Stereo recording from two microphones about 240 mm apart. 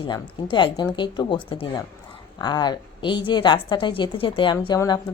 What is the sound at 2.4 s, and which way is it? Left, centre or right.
A woman's voice, centre.